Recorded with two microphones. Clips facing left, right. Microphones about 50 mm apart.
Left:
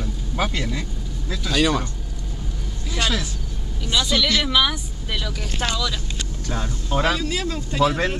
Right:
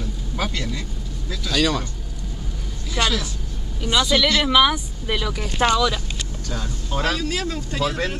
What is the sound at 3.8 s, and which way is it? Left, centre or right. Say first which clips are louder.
Speech: right 3 dB; centre.